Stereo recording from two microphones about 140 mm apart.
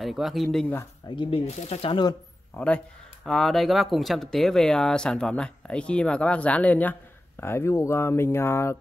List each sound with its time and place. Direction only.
0.0 s speech: centre (ahead or behind)
1.0 s speech: 35° left (ahead or behind)
1.6 s speech: 45° left (ahead or behind)
2.5 s a man's voice: 10° left (ahead or behind)